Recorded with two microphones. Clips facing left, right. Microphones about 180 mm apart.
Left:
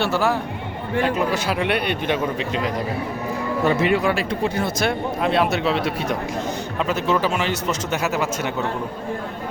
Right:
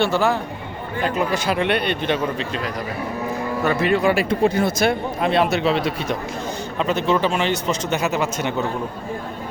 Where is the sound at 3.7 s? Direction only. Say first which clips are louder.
Left 1 dB; 20° left (ahead or behind).